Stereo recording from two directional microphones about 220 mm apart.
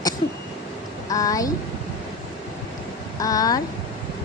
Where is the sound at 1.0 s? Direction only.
15° left (ahead or behind).